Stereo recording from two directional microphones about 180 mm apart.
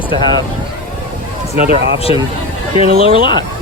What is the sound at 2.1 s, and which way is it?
Speech, 30° left (ahead or behind).